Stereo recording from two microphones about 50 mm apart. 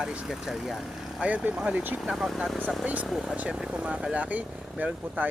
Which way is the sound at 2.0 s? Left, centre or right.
Centre.